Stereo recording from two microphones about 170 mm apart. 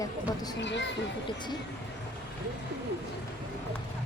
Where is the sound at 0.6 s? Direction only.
90° left.